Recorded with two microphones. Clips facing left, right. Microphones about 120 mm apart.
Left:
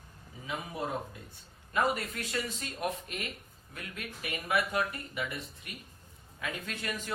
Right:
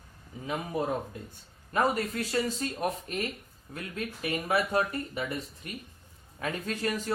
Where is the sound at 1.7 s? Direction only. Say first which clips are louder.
Right 3 dB; 40° right (ahead or behind).